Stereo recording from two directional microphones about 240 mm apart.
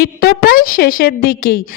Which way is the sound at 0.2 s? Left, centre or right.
Left.